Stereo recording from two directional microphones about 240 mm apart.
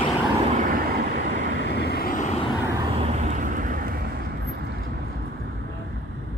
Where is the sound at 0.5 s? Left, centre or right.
Right.